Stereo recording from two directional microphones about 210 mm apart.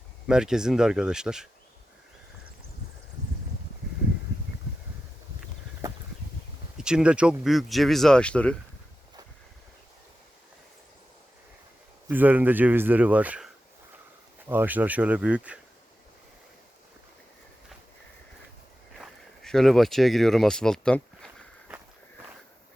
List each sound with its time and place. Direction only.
0.3 s speech: 5° right (ahead or behind)
6.7 s speech: 5° right (ahead or behind)
12.0 s speech: 10° right (ahead or behind)
18.9 s a sound: centre (ahead or behind)